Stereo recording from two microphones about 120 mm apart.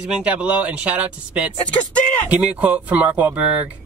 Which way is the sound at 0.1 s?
10° right (ahead or behind).